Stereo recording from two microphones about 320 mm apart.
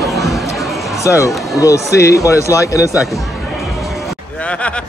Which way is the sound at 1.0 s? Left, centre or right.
Centre.